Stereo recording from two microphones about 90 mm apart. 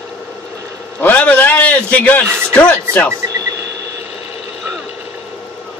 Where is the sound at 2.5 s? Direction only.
15° left (ahead or behind).